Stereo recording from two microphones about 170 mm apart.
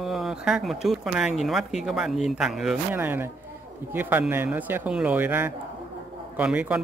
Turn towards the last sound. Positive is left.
turn(degrees=-10)  # may be behind; listen again after turning